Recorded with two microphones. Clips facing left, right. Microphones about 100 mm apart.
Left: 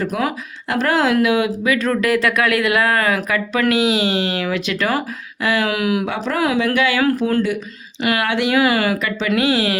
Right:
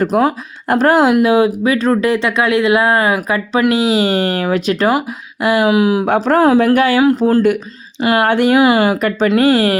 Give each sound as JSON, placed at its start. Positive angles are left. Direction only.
{"t": 0.1, "sound": "speech", "side_deg": -30}
{"t": 0.9, "sound": "speech", "side_deg": -15}
{"t": 1.2, "sound": "speech", "side_deg": -35}
{"t": 5.6, "sound": "speech", "side_deg": -25}
{"t": 6.2, "sound": "speech", "side_deg": -40}
{"t": 8.3, "sound": "speech", "side_deg": -45}
{"t": 8.5, "sound": "speech", "side_deg": -25}
{"t": 9.0, "sound": "speech", "side_deg": -45}